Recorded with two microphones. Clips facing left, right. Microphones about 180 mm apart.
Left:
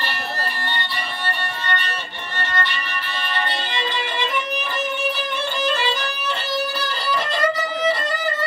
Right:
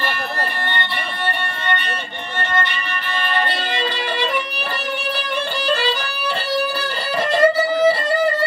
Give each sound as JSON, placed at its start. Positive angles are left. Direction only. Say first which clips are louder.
{"t": 0.7, "sound": "music", "louder": "right 3 dB", "side_deg": -55}
{"t": 2.5, "sound": "music", "louder": "right 3 dB", "side_deg": -50}
{"t": 7.2, "sound": "music", "louder": "right 8 dB", "side_deg": -30}